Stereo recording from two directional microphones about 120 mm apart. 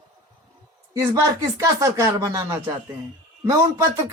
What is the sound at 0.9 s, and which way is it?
Speech, 30° right (ahead or behind).